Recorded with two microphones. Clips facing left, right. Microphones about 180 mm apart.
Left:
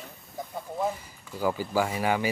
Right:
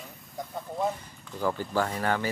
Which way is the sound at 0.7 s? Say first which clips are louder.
Even; 5° left (ahead or behind).